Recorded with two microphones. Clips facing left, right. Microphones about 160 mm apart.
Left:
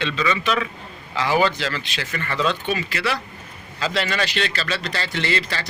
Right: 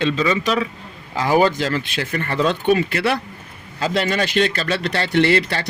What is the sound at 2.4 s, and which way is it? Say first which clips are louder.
Speech: right 6 dB; 55° right (ahead or behind).